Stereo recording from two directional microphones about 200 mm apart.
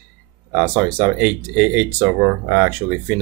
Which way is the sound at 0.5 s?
10° right (ahead or behind).